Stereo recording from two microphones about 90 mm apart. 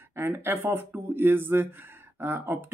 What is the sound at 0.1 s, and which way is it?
Speech, 25° right (ahead or behind).